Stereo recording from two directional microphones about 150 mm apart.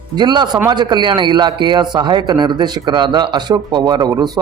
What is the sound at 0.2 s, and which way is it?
A man's voice, 30° right (ahead or behind).